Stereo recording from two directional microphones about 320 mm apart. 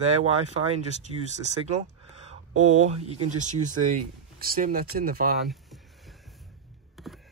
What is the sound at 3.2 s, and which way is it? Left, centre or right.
Speech, right.